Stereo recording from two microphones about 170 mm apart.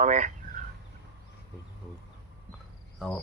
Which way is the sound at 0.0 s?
45° right (ahead or behind).